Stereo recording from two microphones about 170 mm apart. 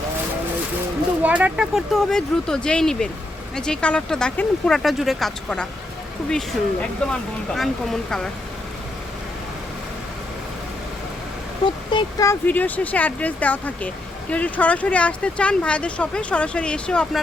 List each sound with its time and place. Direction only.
1.2 s speech: 10° right (ahead or behind)
7.1 s speech: centre (ahead or behind)
11.6 s speech: 30° left (ahead or behind)
12.3 s speech: 10° left (ahead or behind)